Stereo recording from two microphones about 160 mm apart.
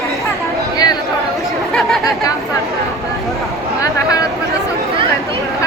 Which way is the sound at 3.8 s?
20° left (ahead or behind).